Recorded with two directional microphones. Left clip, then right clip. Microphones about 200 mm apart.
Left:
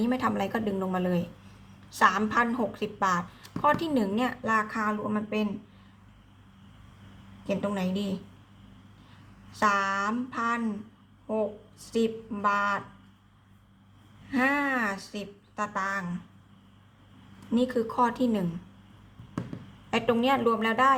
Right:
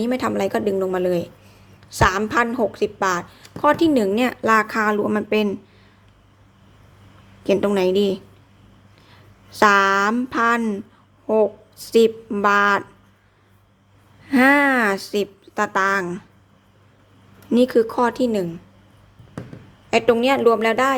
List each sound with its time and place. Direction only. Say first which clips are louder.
0.0 s a woman's voice: right 7 dB; 25° right (ahead or behind); by 5.5 s 45° right (ahead or behind)
7.4 s a woman's voice: right 13 dB; 45° right (ahead or behind)
9.5 s a woman's voice: right 11 dB; 45° right (ahead or behind)
14.3 s a woman's voice: right 11 dB; 45° right (ahead or behind)
17.5 s a woman's voice: right 11 dB; 40° right (ahead or behind)
19.9 s a woman's voice: right 8 dB; 25° right (ahead or behind)